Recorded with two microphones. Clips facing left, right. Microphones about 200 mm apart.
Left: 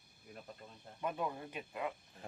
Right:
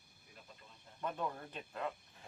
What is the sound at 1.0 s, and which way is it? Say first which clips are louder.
Speech: left 2 dB; 10° left (ahead or behind).